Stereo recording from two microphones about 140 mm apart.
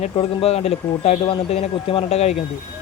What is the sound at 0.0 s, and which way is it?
Speech, 45° left (ahead or behind).